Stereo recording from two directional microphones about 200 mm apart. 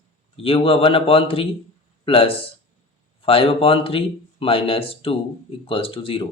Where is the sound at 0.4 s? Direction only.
30° left (ahead or behind).